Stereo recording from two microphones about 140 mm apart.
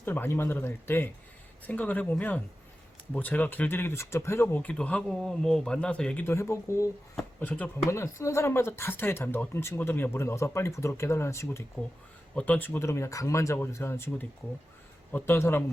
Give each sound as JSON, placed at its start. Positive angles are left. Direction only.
{"t": 0.0, "sound": "speech", "side_deg": 15}